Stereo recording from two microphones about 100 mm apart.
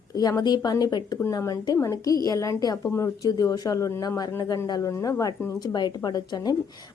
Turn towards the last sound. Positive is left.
turn(degrees=40)  # may be behind; listen again after turning